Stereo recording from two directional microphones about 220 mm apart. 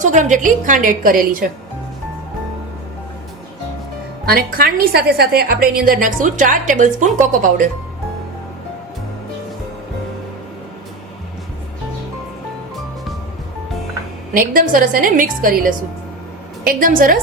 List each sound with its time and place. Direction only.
0.0 s a woman's voice: 35° right (ahead or behind)
4.3 s a woman's voice: 45° right (ahead or behind)
14.3 s a woman's voice: 40° right (ahead or behind)